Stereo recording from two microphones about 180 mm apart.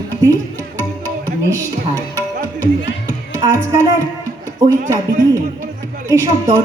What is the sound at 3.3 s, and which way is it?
Music, 20° right (ahead or behind).